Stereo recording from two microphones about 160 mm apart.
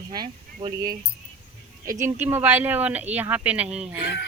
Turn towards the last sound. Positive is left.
turn(degrees=-10)  # may be behind; listen again after turning